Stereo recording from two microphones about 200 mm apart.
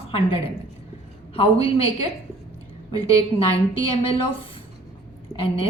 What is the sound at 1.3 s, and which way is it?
Speech, 30° left (ahead or behind).